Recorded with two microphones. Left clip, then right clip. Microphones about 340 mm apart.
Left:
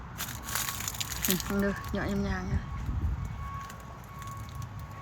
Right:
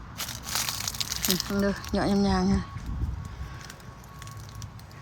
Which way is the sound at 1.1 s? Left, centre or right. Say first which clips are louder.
Right 3 dB; centre.